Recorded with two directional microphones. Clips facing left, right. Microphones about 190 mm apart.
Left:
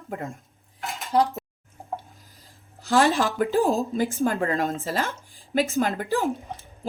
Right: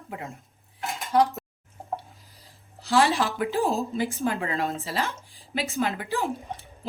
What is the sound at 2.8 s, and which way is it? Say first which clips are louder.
A woman's voice: left 2 dB; 50° left (ahead or behind).